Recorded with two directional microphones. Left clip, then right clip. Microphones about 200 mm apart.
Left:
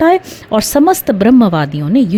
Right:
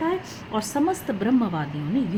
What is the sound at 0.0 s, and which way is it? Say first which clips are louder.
A woman's voice: left 16 dB; 60° left (ahead or behind).